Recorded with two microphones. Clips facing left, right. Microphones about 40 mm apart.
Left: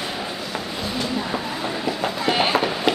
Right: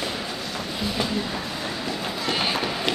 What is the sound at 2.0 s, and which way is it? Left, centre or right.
Run, left.